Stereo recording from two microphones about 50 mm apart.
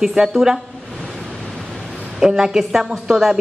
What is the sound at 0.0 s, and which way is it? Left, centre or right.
Speech, centre.